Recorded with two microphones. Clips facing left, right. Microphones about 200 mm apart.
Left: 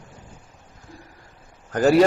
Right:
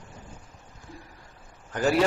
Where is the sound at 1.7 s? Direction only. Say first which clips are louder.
Left 7 dB; 40° left (ahead or behind).